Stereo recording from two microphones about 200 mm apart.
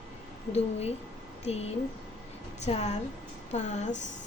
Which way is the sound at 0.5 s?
30° left (ahead or behind).